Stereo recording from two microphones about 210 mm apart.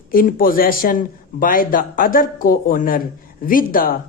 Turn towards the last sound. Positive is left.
turn(degrees=40)  # may be behind; listen again after turning